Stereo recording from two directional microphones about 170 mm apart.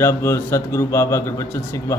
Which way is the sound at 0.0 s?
15° left (ahead or behind).